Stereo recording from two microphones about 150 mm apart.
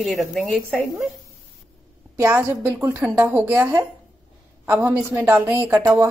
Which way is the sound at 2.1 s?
15° right (ahead or behind).